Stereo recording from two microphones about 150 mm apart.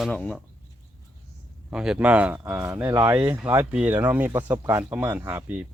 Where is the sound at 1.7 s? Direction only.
5° right (ahead or behind).